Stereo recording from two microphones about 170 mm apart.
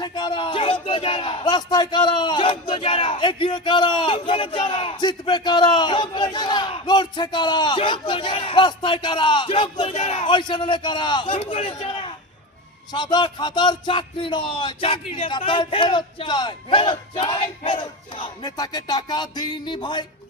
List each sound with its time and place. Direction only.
0.0 s speech: 25° left (ahead or behind)